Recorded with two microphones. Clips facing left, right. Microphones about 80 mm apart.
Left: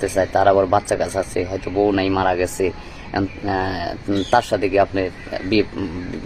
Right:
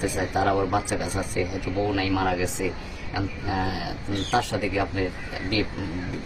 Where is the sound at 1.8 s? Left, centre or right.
Left.